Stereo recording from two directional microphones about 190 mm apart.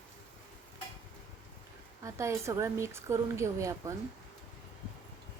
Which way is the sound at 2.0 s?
15° right (ahead or behind).